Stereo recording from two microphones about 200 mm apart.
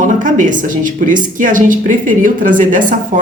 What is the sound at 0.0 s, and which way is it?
A woman's voice, 40° right (ahead or behind).